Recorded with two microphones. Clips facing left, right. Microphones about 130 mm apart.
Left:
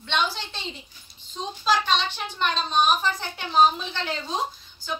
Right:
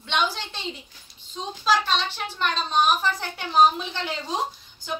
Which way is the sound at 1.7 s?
5° right (ahead or behind).